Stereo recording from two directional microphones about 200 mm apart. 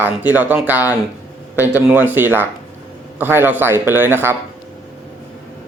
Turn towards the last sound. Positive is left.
turn(degrees=-10)  # may be behind; listen again after turning